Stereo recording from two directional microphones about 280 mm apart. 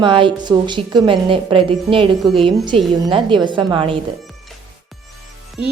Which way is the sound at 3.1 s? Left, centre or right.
Centre.